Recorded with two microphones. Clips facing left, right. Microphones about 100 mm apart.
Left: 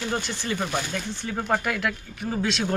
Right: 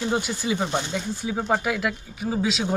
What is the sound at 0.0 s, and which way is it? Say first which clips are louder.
Speech: right 4 dB; 10° right (ahead or behind).